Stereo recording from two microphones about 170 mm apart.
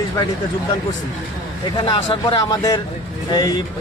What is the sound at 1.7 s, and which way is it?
A man's voice, 30° left (ahead or behind).